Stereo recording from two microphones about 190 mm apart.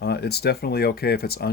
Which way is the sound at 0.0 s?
60° left (ahead or behind).